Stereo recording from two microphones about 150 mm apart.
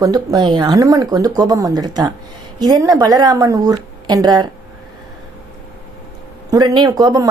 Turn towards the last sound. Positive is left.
turn(degrees=-25)  # may be behind; listen again after turning